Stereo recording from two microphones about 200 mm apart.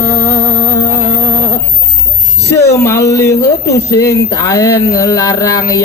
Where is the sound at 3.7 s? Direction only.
15° left (ahead or behind).